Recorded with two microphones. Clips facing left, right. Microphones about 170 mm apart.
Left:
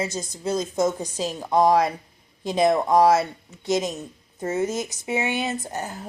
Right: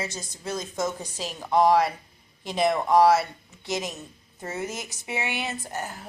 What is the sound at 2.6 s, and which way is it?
A woman's voice, 20° left (ahead or behind).